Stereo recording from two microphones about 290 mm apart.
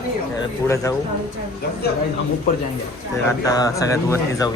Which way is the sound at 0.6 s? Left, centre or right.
Centre.